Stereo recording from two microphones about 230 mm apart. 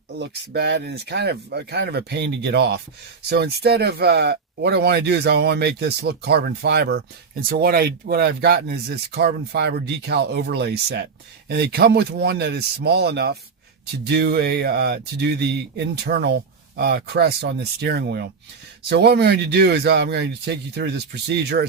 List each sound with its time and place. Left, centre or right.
0.5 s speech: right